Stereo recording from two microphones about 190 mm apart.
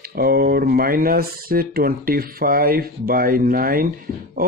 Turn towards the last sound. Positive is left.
turn(degrees=-50)  # may be behind; listen again after turning